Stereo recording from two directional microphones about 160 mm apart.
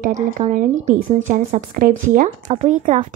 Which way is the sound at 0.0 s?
50° right (ahead or behind).